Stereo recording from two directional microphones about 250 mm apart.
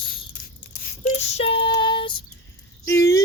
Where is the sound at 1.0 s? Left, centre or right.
Left.